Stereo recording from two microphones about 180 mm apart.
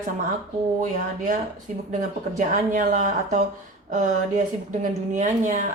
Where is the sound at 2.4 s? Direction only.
40° right (ahead or behind).